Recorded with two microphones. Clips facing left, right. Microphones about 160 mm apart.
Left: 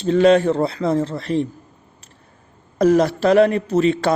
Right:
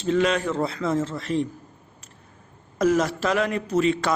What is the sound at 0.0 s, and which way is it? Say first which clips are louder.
A man's voice: left 8 dB; 35° left (ahead or behind).